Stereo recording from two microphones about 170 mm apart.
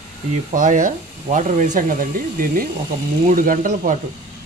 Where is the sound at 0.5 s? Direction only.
50° right (ahead or behind).